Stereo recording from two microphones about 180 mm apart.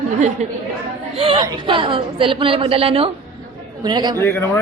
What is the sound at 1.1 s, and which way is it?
A woman's voice, 30° right (ahead or behind).